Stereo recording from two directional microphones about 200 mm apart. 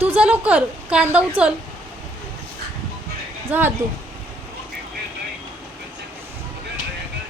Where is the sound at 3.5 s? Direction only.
10° right (ahead or behind).